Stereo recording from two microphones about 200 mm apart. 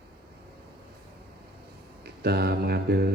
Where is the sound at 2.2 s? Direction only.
55° right (ahead or behind).